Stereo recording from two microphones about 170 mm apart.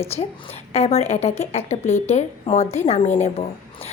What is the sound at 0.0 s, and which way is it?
A woman's voice, 40° left (ahead or behind).